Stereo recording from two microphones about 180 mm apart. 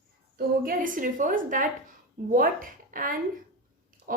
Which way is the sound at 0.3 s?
50° right (ahead or behind).